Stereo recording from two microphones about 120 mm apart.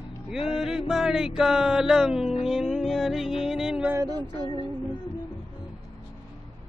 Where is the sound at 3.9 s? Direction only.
30° right (ahead or behind).